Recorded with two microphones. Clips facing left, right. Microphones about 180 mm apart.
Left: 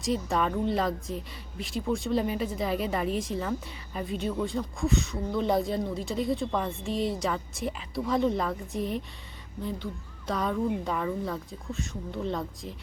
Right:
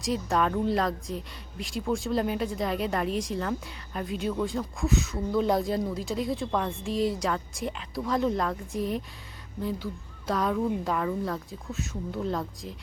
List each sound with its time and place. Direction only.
0.0 s speech: centre (ahead or behind)